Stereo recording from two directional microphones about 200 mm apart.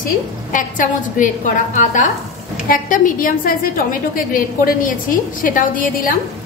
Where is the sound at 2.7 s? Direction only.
40° left (ahead or behind).